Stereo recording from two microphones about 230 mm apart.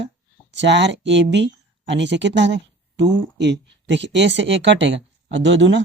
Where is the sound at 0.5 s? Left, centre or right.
Right.